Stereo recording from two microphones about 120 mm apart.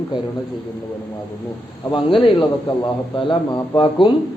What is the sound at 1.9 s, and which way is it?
Speech, 45° left (ahead or behind).